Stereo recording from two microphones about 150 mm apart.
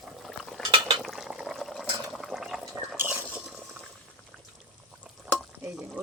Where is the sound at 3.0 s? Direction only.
15° right (ahead or behind).